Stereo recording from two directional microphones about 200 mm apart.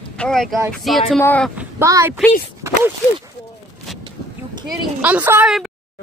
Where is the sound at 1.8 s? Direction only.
15° right (ahead or behind).